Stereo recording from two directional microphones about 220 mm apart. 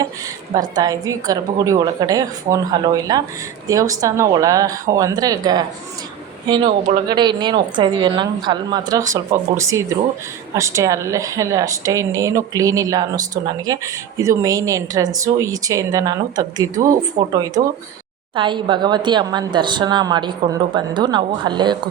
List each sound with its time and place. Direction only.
0.8 s a woman's voice: 15° right (ahead or behind)
6.7 s speech: 35° right (ahead or behind)
7.1 s a woman's voice: 20° right (ahead or behind)